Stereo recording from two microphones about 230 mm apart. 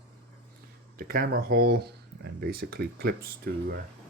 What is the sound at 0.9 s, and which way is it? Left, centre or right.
Speech, right.